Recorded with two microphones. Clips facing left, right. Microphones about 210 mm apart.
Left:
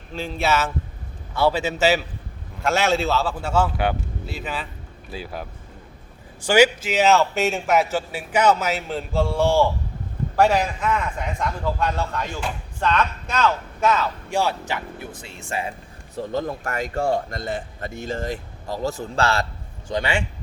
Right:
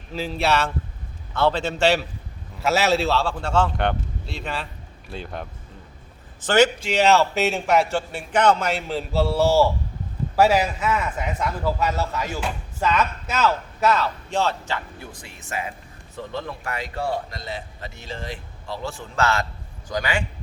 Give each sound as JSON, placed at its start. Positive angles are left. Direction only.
{"t": 0.1, "sound": "a man's voice", "side_deg": -5}
{"t": 14.3, "sound": "speech", "side_deg": 10}
{"t": 15.4, "sound": "a man's voice", "side_deg": 30}
{"t": 16.1, "sound": "a man's voice", "side_deg": 40}